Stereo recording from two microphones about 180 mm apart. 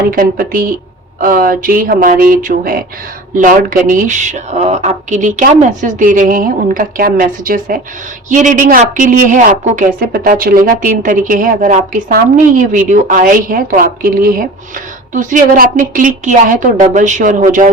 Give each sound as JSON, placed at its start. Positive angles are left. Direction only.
{"t": 0.0, "sound": "a woman's voice", "side_deg": -55}